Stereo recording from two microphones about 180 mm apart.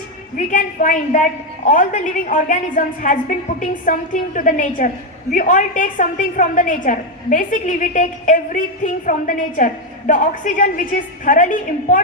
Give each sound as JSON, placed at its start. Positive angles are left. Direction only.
{"t": 0.3, "sound": "a woman's voice", "side_deg": 45}